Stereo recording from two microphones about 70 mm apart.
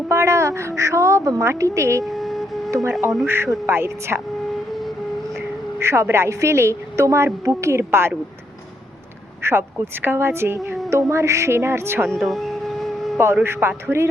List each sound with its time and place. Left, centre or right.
0.1 s a woman's voice: right
2.0 s a sound: centre
3.2 s speech: right
5.8 s a woman's voice: right
9.4 s speech: right
12.0 s a sound: centre
13.4 s speech: right